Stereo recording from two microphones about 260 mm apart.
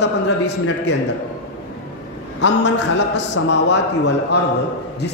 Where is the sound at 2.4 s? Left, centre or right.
Left.